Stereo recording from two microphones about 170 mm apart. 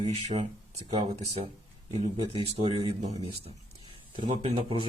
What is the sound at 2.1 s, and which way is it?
Speech, 35° right (ahead or behind).